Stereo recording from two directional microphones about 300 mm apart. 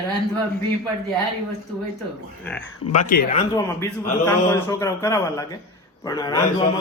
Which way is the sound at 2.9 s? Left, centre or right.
Left.